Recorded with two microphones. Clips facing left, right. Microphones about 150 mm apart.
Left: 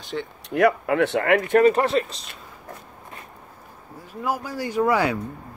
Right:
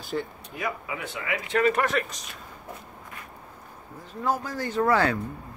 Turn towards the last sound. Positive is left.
turn(degrees=10)  # may be behind; listen again after turning